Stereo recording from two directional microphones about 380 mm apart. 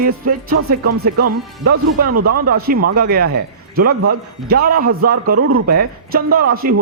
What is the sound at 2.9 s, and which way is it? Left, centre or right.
Speech, right.